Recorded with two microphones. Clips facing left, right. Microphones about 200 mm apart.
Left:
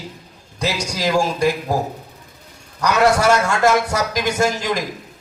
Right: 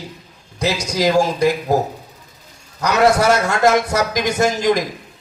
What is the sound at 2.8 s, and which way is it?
A man's voice, 20° right (ahead or behind).